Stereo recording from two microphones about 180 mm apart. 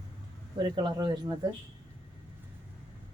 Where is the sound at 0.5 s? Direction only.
25° right (ahead or behind).